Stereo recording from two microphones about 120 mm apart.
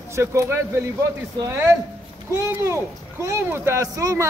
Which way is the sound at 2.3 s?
25° right (ahead or behind).